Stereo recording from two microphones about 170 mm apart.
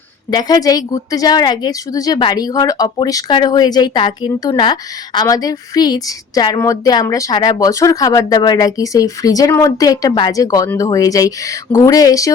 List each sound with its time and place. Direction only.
0.3 s a woman's voice: 25° left (ahead or behind)